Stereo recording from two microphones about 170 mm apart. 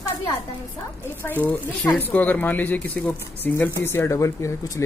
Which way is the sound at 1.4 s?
10° left (ahead or behind).